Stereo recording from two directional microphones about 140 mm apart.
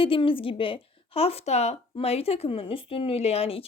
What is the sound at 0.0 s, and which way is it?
A woman's voice, 40° left (ahead or behind).